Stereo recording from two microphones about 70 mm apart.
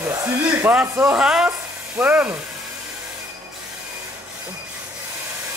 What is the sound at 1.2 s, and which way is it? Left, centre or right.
Speech, centre.